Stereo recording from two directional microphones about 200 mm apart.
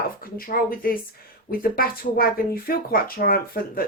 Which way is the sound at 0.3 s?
45° left (ahead or behind).